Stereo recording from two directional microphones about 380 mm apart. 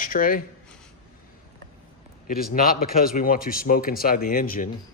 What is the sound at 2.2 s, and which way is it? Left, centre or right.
Speech, left.